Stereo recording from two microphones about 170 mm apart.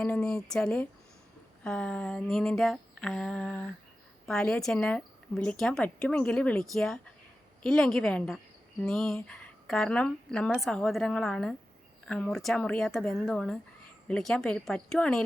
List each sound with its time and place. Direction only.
0.0 s a woman's voice: 5° left (ahead or behind)